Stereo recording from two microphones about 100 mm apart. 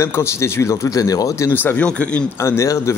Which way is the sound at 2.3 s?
25° left (ahead or behind).